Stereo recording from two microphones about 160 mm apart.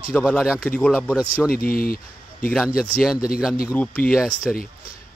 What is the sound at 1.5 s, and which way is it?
Speech, 65° left (ahead or behind).